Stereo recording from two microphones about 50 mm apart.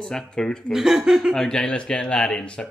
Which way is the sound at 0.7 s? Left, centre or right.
Centre.